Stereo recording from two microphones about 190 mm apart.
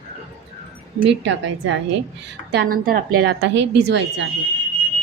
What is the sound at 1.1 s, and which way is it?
Speech, 70° right (ahead or behind).